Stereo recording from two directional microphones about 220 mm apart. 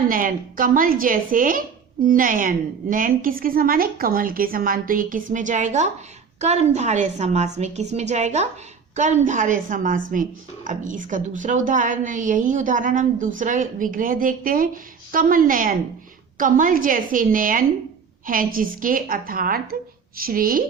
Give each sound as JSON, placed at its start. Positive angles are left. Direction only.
{"t": 0.1, "sound": "speech", "side_deg": -40}